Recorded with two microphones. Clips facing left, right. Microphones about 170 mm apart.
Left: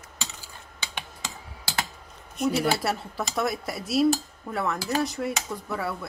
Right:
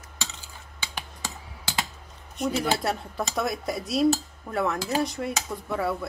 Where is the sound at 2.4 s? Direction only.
5° left (ahead or behind).